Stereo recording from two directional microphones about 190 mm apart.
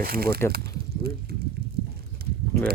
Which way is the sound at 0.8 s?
55° right (ahead or behind).